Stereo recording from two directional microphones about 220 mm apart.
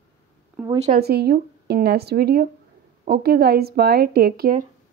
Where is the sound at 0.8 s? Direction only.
45° right (ahead or behind).